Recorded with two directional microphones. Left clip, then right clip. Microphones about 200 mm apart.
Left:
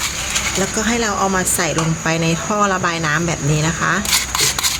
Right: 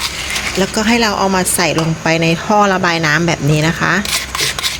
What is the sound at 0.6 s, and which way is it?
Speech, 40° right (ahead or behind).